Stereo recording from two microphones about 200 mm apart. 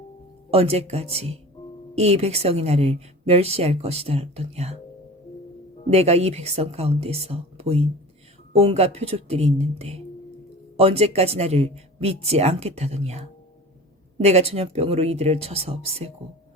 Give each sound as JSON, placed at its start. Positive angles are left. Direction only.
{"t": 0.5, "sound": "a woman's voice", "side_deg": -30}
{"t": 5.9, "sound": "a woman's voice", "side_deg": -30}